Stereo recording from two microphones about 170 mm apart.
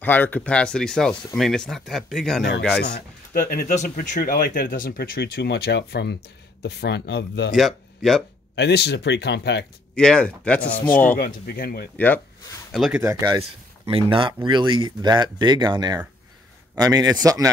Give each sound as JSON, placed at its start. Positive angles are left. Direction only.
{"t": 0.0, "sound": "speech", "side_deg": 10}
{"t": 3.3, "sound": "speech", "side_deg": 55}
{"t": 7.5, "sound": "speech", "side_deg": 0}
{"t": 8.5, "sound": "speech", "side_deg": 85}
{"t": 9.9, "sound": "speech", "side_deg": 5}
{"t": 11.1, "sound": "speech", "side_deg": 60}
{"t": 12.7, "sound": "speech", "side_deg": 0}
{"t": 13.0, "sound": "speech", "side_deg": -15}
{"t": 13.8, "sound": "speech", "side_deg": -30}